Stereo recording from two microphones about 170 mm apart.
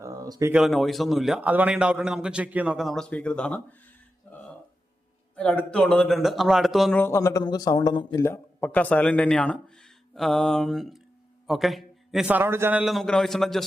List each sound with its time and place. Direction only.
0.0 s a sound: 20° right (ahead or behind)
0.5 s a man's voice: centre (ahead or behind)
4.3 s music: 10° left (ahead or behind)
5.4 s a man's voice: 5° left (ahead or behind)
7.0 s a man's voice: 15° left (ahead or behind); by 12.8 s 15° right (ahead or behind)
12.8 s a man's voice: centre (ahead or behind)